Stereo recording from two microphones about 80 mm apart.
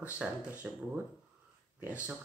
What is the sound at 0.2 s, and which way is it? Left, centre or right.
Speech, centre.